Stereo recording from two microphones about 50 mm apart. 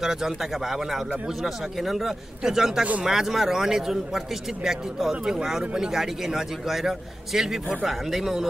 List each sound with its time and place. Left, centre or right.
0.0 s a man's voice: centre
2.8 s speech: right
3.1 s a man's voice: centre